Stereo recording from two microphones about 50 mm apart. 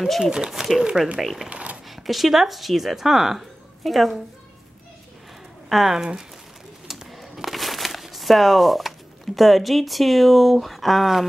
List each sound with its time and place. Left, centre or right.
0.2 s speech: centre
0.5 s speech: centre
0.8 s speech: right
1.5 s a sound: right
1.9 s speech: centre
5.7 s speech: centre
6.9 s a sound: centre